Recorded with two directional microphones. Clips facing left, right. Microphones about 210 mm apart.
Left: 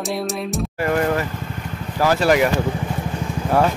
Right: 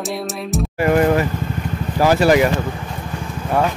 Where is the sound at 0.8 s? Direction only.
15° right (ahead or behind).